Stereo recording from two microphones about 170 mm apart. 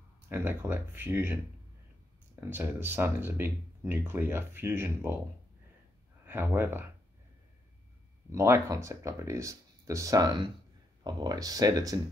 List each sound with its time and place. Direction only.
0.3 s speech: 10° right (ahead or behind)
2.5 s speech: 10° right (ahead or behind)
6.2 s speech: 15° right (ahead or behind)
8.3 s speech: 20° right (ahead or behind)